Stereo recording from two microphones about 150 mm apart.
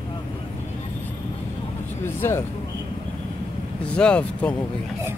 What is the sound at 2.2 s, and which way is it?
Speech, 15° left (ahead or behind).